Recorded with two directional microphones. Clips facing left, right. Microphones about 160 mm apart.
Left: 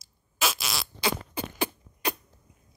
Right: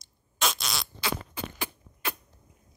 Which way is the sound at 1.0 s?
20° left (ahead or behind).